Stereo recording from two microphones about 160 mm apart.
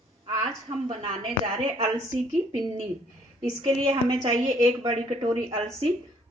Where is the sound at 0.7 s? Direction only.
45° right (ahead or behind).